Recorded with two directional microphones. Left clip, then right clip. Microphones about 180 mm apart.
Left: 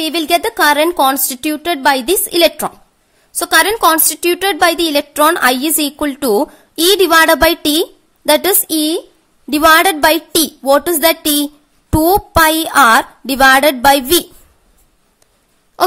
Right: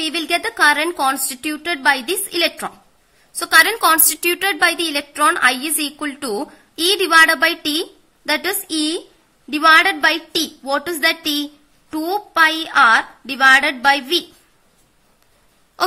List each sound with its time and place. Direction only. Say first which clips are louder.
0.0 s a woman's voice: left 6 dB; 50° left (ahead or behind)